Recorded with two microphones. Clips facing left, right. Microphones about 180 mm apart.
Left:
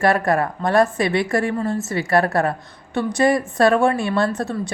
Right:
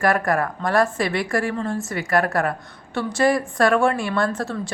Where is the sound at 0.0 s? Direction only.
25° left (ahead or behind).